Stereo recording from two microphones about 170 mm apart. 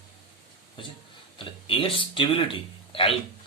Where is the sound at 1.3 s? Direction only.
30° left (ahead or behind).